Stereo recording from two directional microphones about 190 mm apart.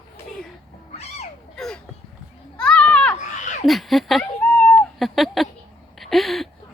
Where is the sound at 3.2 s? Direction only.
40° left (ahead or behind).